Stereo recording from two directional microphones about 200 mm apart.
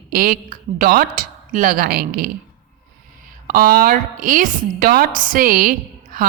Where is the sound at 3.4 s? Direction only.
45° right (ahead or behind).